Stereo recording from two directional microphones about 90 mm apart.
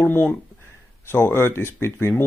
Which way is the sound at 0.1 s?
25° left (ahead or behind).